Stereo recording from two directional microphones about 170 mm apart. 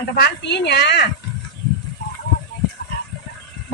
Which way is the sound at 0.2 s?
75° left (ahead or behind).